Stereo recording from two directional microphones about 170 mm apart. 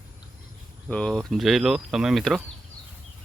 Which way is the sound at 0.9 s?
5° left (ahead or behind).